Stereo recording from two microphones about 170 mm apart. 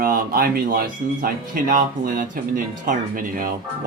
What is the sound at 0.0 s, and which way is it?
Speech, 55° right (ahead or behind).